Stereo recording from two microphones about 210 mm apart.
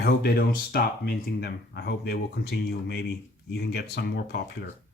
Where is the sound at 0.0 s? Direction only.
45° left (ahead or behind).